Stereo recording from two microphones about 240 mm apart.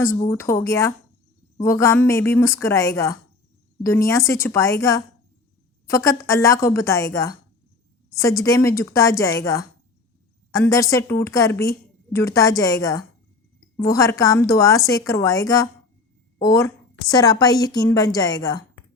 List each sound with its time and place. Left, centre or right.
0.3 s a woman's voice: centre